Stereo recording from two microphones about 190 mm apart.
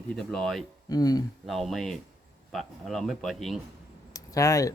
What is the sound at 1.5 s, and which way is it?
A man's voice, centre (ahead or behind).